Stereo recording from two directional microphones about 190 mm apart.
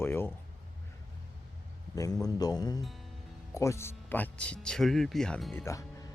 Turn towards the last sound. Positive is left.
turn(degrees=15)  # may be behind; listen again after turning